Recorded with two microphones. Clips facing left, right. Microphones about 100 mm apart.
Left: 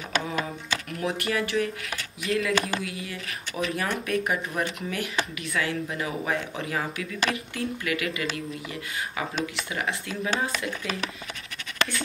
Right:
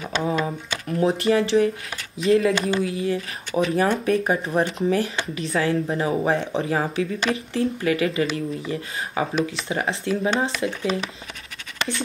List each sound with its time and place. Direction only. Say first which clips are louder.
0.8 s speech: right 11 dB; 30° right (ahead or behind)